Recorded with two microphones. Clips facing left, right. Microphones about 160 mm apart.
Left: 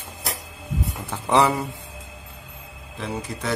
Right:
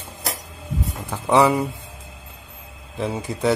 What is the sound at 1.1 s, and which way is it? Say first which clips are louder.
Speech: right 3 dB; 10° right (ahead or behind).